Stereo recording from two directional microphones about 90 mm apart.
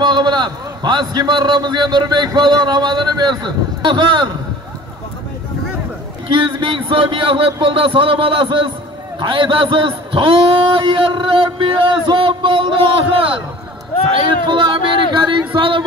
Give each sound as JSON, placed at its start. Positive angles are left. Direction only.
{"t": 0.0, "sound": "a man's voice", "side_deg": -55}
{"t": 6.6, "sound": "a man's voice", "side_deg": -70}
{"t": 14.1, "sound": "a man's voice", "side_deg": -65}